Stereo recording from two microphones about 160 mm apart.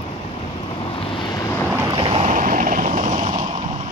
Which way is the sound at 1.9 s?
40° right (ahead or behind).